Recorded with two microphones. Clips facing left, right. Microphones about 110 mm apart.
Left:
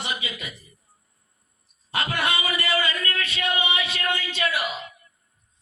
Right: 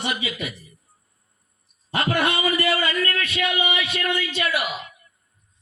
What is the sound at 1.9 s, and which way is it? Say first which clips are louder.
A man's voice: right 4 dB; 45° right (ahead or behind).